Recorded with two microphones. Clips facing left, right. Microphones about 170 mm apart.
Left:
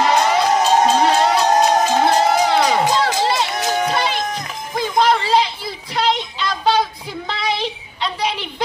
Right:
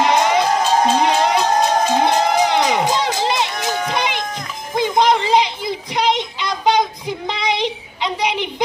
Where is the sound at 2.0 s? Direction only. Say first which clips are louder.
Left 1 dB; 20° right (ahead or behind).